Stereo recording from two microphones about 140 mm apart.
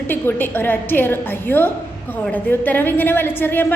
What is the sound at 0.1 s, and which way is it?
A woman's voice, 15° left (ahead or behind).